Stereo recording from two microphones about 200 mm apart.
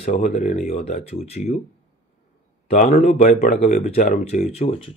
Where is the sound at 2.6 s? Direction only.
40° left (ahead or behind).